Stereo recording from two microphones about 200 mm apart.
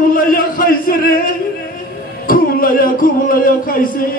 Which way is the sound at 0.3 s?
45° left (ahead or behind).